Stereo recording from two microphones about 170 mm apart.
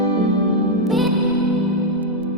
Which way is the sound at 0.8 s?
Centre (ahead or behind).